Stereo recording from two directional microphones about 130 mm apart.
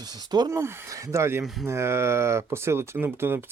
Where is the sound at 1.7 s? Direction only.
20° right (ahead or behind).